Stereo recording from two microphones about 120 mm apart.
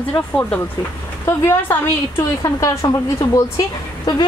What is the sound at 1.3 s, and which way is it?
Speech, 20° left (ahead or behind).